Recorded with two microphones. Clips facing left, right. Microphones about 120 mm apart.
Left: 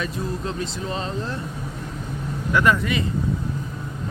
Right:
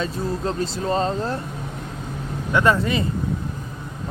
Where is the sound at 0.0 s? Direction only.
35° right (ahead or behind).